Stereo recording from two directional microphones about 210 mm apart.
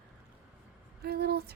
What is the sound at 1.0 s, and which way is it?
Speech, 50° right (ahead or behind).